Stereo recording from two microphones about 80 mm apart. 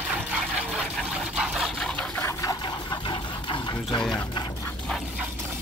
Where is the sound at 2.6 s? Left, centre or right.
Left.